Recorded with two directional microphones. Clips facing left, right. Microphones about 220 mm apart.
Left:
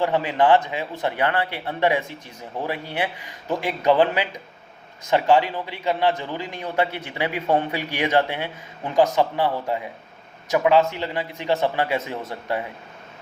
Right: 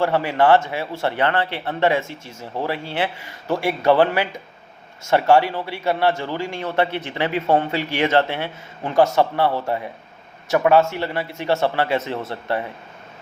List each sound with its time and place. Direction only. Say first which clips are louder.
0.0 s a man's voice: right 2 dB; 15° left (ahead or behind)
10.8 s a man's voice: right 2 dB; 15° left (ahead or behind)